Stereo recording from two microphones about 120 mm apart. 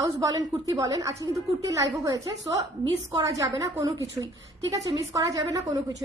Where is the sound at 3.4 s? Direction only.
30° right (ahead or behind).